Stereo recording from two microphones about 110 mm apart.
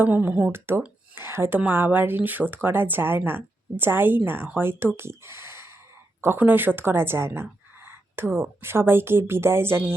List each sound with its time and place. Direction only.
0.0 s speech: 15° right (ahead or behind)
4.9 s a sound: 25° right (ahead or behind)
6.2 s speech: 20° right (ahead or behind)